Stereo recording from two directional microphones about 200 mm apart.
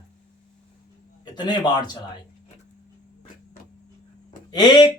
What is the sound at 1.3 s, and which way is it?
Speech, 20° left (ahead or behind).